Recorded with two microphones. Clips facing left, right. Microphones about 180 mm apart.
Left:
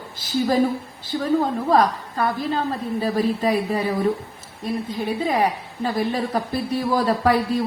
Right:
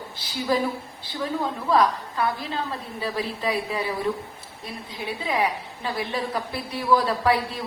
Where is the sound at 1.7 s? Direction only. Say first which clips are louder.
Left 1 dB; 45° left (ahead or behind).